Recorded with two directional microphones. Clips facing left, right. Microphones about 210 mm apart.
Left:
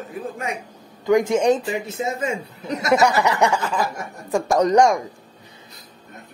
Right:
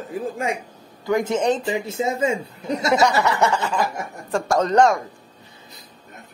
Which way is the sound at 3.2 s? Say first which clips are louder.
Left 1 dB; 15° left (ahead or behind).